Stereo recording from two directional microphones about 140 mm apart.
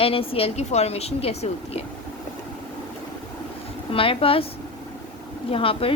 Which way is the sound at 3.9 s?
40° left (ahead or behind).